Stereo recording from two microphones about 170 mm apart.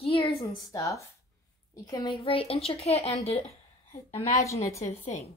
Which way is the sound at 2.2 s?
35° left (ahead or behind).